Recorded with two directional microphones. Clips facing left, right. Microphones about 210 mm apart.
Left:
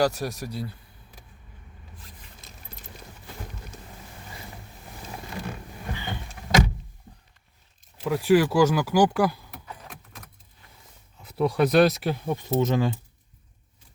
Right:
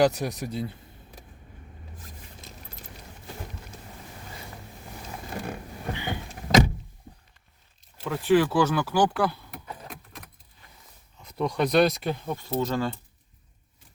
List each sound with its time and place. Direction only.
0.0 s speech: 20° right (ahead or behind)
5.9 s vehicle: 15° right (ahead or behind)
8.0 s speech: 10° left (ahead or behind)
11.2 s speech: 5° left (ahead or behind)
12.4 s speech: 20° left (ahead or behind)